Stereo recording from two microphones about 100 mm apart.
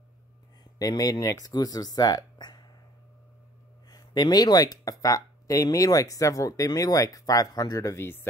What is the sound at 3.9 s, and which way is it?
Speech, 45° left (ahead or behind).